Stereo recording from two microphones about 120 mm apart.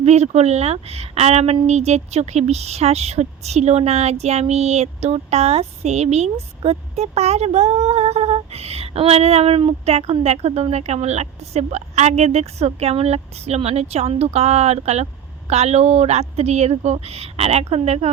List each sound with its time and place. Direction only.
0.0 s speech: 65° right (ahead or behind)